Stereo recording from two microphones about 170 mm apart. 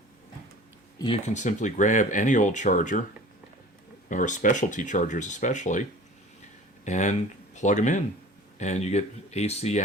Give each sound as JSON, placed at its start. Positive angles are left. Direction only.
{"t": 0.9, "sound": "speech", "side_deg": 30}
{"t": 1.3, "sound": "speech", "side_deg": 45}
{"t": 4.1, "sound": "speech", "side_deg": 50}
{"t": 6.8, "sound": "speech", "side_deg": 45}